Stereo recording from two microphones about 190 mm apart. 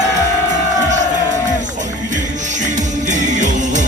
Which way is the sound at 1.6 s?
40° right (ahead or behind).